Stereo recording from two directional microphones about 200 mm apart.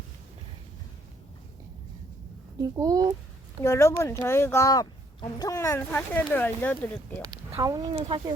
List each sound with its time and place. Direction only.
2.6 s speech: 20° right (ahead or behind)
3.6 s speech: 15° left (ahead or behind)
7.2 s speech: 20° right (ahead or behind)